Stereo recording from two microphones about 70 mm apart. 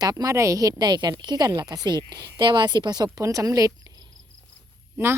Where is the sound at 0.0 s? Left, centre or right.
Right.